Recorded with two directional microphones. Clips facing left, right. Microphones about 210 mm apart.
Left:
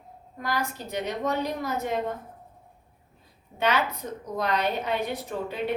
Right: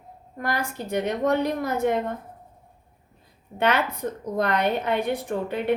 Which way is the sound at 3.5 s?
55° right (ahead or behind).